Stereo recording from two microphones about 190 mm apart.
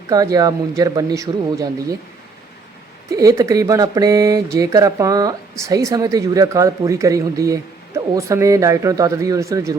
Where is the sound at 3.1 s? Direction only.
15° right (ahead or behind).